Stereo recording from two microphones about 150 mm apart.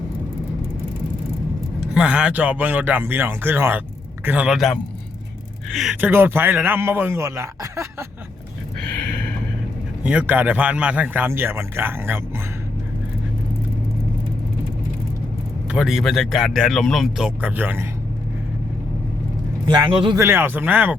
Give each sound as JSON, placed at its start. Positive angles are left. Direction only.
{"t": 1.9, "sound": "speech", "side_deg": -5}
{"t": 6.0, "sound": "speech", "side_deg": -15}
{"t": 10.0, "sound": "speech", "side_deg": -10}
{"t": 15.7, "sound": "speech", "side_deg": -5}
{"t": 19.9, "sound": "speech", "side_deg": -35}
{"t": 20.1, "sound": "speech", "side_deg": -15}